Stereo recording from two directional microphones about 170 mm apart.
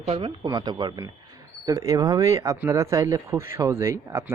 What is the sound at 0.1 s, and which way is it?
Speech, 30° right (ahead or behind).